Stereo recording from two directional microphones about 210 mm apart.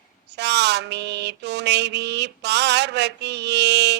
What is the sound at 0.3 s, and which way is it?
Mantra, 55° right (ahead or behind).